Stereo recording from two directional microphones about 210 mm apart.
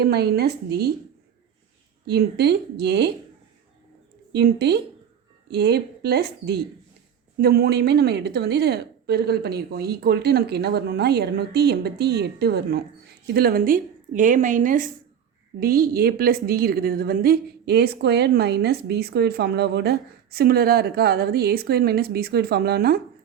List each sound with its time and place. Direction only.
0.0 s a woman's voice: 50° right (ahead or behind)
2.0 s a woman's voice: 50° right (ahead or behind)
4.3 s a woman's voice: 50° right (ahead or behind)